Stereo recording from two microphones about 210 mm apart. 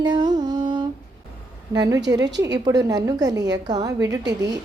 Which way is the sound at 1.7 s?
15° right (ahead or behind).